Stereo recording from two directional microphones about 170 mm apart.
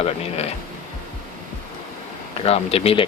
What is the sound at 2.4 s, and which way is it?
Speech, 35° left (ahead or behind).